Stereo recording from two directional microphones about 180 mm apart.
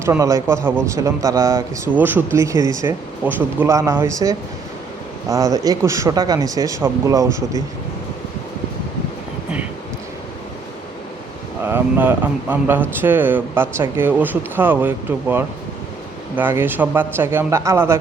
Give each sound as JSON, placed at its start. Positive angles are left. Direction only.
{"t": 0.0, "sound": "speech", "side_deg": -15}
{"t": 11.6, "sound": "speech", "side_deg": -10}